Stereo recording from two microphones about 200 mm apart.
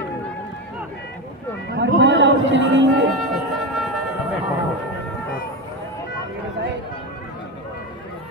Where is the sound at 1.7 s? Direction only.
60° right (ahead or behind).